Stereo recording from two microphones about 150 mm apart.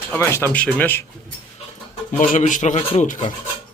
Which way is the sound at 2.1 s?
55° left (ahead or behind).